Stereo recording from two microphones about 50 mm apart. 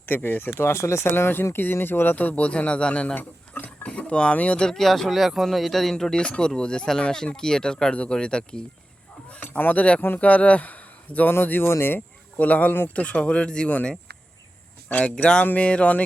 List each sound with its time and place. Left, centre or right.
0.0 s speech: left
1.0 s speech: left
2.1 s speech: left
3.2 s speech: left
3.8 s speech: left
4.7 s speech: centre
9.4 s speech: left
11.3 s speech: left
11.9 s speech: left
12.9 s speech: left
15.0 s speech: centre